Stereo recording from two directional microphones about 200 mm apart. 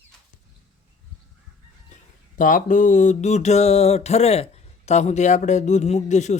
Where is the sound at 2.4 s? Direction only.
40° left (ahead or behind).